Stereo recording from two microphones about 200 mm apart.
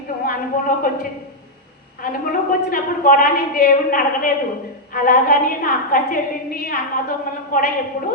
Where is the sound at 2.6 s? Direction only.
45° left (ahead or behind).